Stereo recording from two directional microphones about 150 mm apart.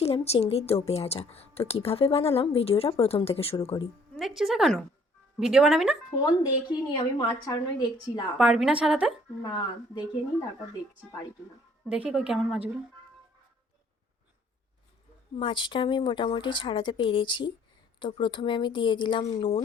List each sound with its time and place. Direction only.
0.0 s a woman's voice: 45° left (ahead or behind)
4.2 s a woman's voice: 5° right (ahead or behind)
6.1 s a woman's voice: 25° left (ahead or behind)
8.4 s a woman's voice: 5° right (ahead or behind)
9.4 s a woman's voice: 30° left (ahead or behind)
11.9 s a woman's voice: 5° right (ahead or behind)
15.4 s a woman's voice: 30° left (ahead or behind)